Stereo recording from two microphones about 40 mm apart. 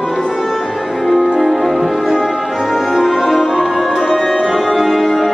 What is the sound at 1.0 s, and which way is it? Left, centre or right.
Music, centre.